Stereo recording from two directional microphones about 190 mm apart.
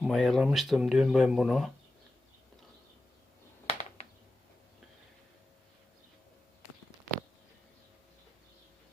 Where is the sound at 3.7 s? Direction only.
35° left (ahead or behind).